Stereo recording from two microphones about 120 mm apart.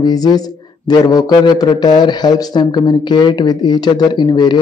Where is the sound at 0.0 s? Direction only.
35° left (ahead or behind).